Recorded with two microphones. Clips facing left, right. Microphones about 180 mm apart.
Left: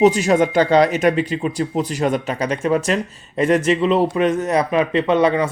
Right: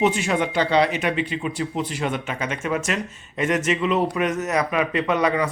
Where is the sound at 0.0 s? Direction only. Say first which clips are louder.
Left 7 dB; 40° left (ahead or behind).